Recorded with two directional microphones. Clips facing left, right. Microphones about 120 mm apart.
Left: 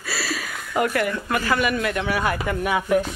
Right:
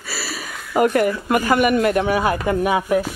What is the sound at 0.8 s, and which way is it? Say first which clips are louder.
Speech: right 8 dB; 35° right (ahead or behind).